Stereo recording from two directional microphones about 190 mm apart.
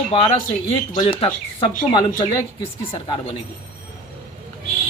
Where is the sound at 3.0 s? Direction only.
25° left (ahead or behind).